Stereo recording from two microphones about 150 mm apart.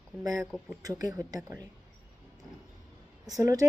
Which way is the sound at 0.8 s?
20° right (ahead or behind).